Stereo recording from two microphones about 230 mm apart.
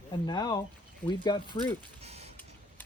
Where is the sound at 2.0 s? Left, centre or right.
Right.